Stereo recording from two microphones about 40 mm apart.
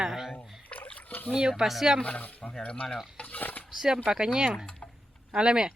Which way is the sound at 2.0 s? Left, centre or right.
Left.